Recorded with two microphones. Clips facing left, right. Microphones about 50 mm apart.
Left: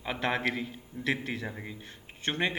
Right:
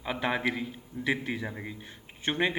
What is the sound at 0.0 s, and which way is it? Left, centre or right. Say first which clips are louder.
A man's voice: right 1 dB; centre.